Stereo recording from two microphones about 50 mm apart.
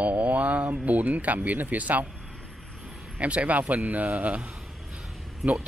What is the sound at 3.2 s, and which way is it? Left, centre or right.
Speech, right.